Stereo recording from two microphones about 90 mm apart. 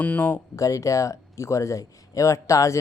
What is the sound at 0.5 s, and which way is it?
Speech, 35° left (ahead or behind).